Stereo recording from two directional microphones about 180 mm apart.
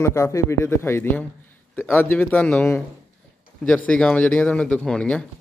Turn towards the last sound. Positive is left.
turn(degrees=5)  # may be behind; listen again after turning